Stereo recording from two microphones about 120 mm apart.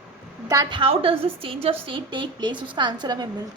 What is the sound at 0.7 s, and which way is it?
A woman's voice, 50° right (ahead or behind).